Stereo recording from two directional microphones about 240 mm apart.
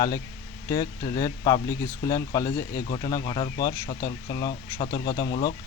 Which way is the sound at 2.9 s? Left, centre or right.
Centre.